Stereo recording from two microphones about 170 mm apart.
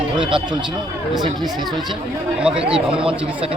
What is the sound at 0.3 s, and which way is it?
Speech, 30° right (ahead or behind).